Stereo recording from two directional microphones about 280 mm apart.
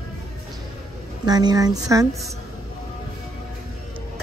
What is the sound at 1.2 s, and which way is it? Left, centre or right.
Speech, centre.